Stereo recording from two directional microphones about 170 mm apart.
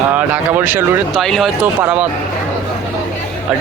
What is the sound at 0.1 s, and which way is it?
Speech, 10° right (ahead or behind).